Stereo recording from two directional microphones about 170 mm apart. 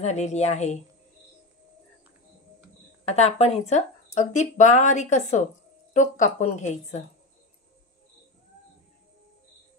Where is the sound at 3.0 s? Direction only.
40° left (ahead or behind).